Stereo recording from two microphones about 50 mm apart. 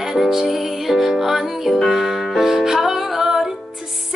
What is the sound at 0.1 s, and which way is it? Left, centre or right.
Music, centre.